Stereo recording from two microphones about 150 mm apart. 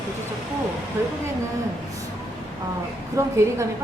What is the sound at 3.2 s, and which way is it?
Speech, 20° right (ahead or behind).